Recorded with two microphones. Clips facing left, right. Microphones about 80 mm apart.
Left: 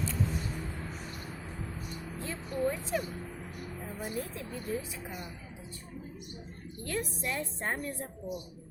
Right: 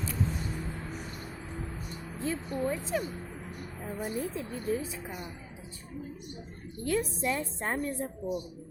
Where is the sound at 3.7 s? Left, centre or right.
Centre.